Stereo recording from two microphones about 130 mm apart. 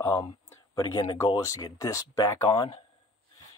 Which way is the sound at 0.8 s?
35° left (ahead or behind).